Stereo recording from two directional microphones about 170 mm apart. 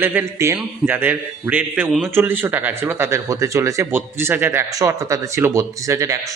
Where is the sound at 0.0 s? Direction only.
10° right (ahead or behind).